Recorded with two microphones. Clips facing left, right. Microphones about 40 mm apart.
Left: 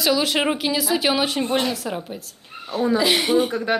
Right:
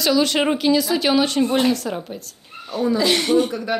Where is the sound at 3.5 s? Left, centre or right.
Left.